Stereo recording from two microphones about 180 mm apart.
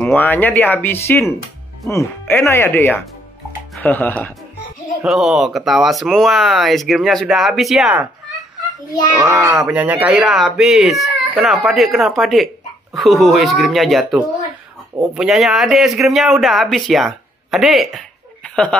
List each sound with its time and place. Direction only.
0.0 s speech: 10° left (ahead or behind)
5.0 s speech: centre (ahead or behind)
9.2 s speech: 20° right (ahead or behind); by 18.8 s 5° left (ahead or behind)